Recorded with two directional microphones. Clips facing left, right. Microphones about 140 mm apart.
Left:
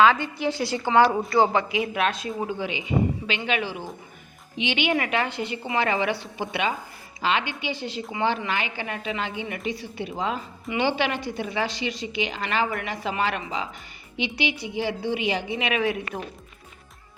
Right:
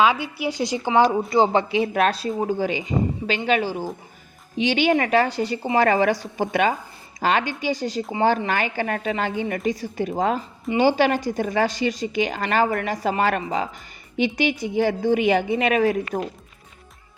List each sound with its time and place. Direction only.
0.0 s a woman's voice: 10° right (ahead or behind)
1.3 s speech: 25° right (ahead or behind)
1.9 s a woman's voice: 40° right (ahead or behind)